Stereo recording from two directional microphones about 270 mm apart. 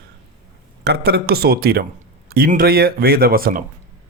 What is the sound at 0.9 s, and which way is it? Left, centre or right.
Speech, right.